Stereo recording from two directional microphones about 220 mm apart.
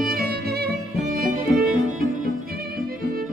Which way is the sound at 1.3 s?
40° right (ahead or behind).